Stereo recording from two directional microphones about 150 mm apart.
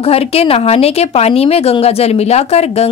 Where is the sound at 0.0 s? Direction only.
40° left (ahead or behind).